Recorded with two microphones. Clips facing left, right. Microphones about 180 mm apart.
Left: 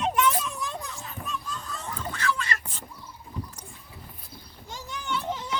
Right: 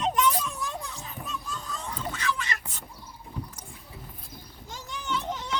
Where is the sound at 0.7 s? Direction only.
10° right (ahead or behind).